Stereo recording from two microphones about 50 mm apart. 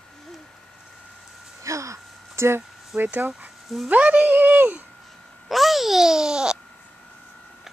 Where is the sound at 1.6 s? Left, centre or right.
Right.